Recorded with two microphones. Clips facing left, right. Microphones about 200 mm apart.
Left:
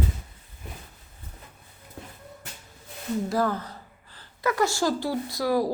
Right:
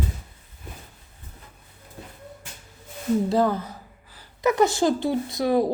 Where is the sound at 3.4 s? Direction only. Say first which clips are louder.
Right 4 dB; 15° right (ahead or behind).